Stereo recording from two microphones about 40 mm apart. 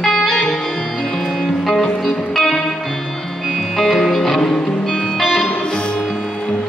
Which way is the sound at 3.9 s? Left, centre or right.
Centre.